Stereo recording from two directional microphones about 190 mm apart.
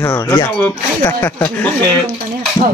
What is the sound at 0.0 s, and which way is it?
Speech, 10° left (ahead or behind).